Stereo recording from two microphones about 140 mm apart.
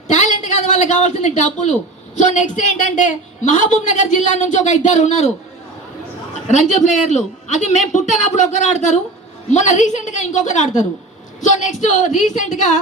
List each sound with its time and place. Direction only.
0.1 s a man's voice: 60° left (ahead or behind)
6.5 s a woman's voice: 60° left (ahead or behind)